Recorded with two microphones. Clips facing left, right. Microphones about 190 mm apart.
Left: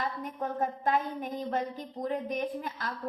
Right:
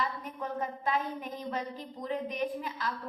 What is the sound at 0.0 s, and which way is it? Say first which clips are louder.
A woman's voice: left 2 dB; 45° left (ahead or behind).